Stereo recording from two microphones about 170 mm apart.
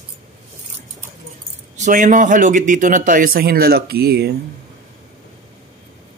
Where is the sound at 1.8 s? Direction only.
45° right (ahead or behind); by 4.4 s 70° right (ahead or behind).